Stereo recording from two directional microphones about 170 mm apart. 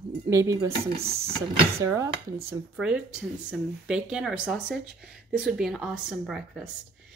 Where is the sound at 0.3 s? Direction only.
15° right (ahead or behind).